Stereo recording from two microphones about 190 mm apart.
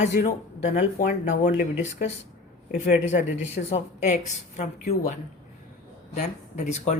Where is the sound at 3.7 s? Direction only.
35° left (ahead or behind).